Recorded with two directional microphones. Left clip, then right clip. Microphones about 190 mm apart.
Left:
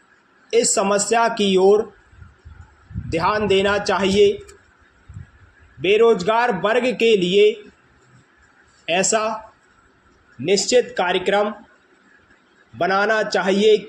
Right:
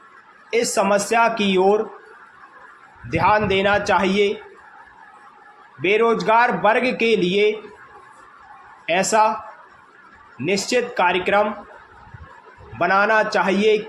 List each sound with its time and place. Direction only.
0.5 s speech: 30° left (ahead or behind)
3.1 s speech: 30° left (ahead or behind)
5.8 s speech: 30° left (ahead or behind)
8.9 s speech: 30° left (ahead or behind)
10.4 s speech: 35° left (ahead or behind)
12.8 s speech: 35° left (ahead or behind)